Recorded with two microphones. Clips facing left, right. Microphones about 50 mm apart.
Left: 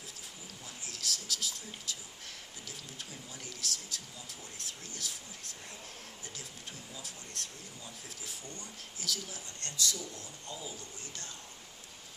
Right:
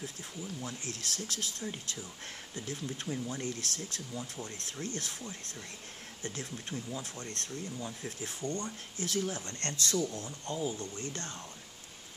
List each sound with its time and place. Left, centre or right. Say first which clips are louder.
0.6 s speech: right 6 dB; right
9.0 s speech: right 7 dB; right